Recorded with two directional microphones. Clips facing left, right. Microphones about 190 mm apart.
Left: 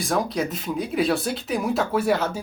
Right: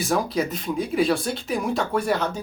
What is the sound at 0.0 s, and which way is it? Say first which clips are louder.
Speech: right 1 dB; centre (ahead or behind).